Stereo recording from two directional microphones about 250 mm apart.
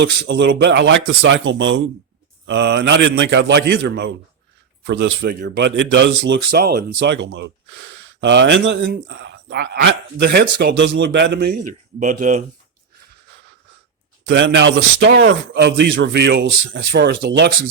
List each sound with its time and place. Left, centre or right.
0.0 s a man's voice: right
12.2 s speech: right
14.3 s a man's voice: right